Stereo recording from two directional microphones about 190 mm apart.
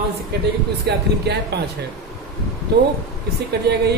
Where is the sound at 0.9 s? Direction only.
60° right (ahead or behind).